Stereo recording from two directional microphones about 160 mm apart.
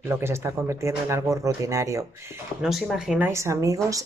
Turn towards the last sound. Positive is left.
turn(degrees=-20)  # may be behind; listen again after turning